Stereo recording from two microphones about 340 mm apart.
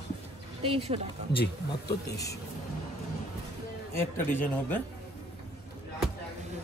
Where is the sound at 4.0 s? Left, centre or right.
Centre.